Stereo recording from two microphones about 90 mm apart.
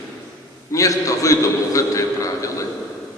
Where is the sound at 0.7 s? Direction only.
40° left (ahead or behind).